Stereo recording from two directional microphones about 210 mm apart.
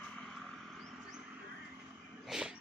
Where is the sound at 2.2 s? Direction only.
5° right (ahead or behind).